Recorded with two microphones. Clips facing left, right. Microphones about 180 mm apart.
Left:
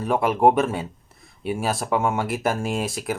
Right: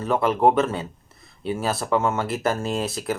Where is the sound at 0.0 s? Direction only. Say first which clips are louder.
Left 1 dB; 10° left (ahead or behind).